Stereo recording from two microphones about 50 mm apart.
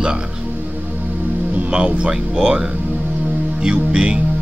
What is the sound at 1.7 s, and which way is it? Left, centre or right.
Speech, centre.